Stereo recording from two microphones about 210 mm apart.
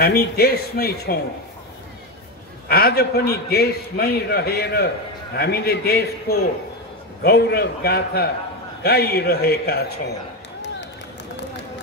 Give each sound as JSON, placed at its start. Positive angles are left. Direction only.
{"t": 0.0, "sound": "a man's voice", "side_deg": 45}
{"t": 2.7, "sound": "a man's voice", "side_deg": 50}
{"t": 7.2, "sound": "a man's voice", "side_deg": 50}